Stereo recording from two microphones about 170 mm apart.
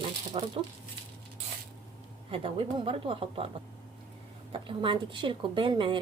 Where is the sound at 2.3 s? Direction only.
30° right (ahead or behind).